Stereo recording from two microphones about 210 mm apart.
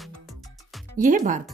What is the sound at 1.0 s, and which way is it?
Speech, 40° right (ahead or behind).